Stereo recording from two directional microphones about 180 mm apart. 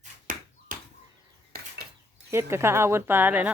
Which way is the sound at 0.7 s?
50° right (ahead or behind).